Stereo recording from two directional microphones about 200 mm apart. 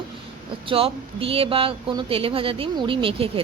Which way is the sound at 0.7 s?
30° right (ahead or behind).